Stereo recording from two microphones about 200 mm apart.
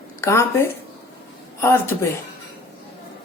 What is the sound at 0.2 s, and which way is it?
Speech, 15° left (ahead or behind).